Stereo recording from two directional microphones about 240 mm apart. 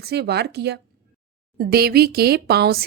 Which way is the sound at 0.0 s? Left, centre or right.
Right.